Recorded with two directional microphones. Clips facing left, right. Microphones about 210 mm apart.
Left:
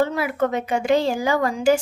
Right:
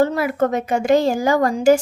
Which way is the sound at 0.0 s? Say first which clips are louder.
Right 3 dB; 40° right (ahead or behind).